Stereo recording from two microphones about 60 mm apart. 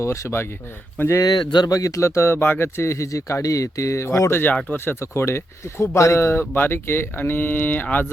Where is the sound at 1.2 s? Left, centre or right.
Left.